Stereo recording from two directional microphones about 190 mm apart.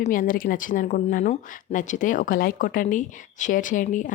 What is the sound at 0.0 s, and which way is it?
Speech, 45° left (ahead or behind).